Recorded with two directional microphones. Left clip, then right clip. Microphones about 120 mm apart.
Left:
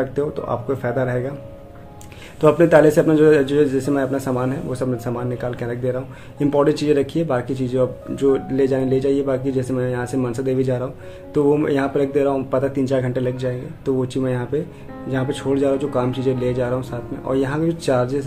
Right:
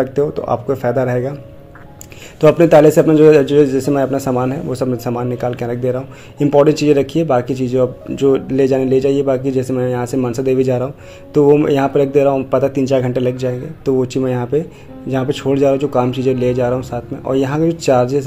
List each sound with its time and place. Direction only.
0.0 s a man's voice: 30° right (ahead or behind)
2.4 s a man's voice: 30° right (ahead or behind)